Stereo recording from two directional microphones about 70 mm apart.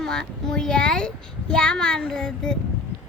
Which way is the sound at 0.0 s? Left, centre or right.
Centre.